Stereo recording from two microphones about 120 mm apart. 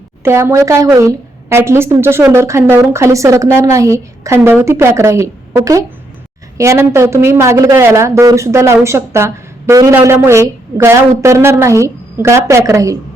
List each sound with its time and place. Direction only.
0.2 s a woman's voice: 20° right (ahead or behind)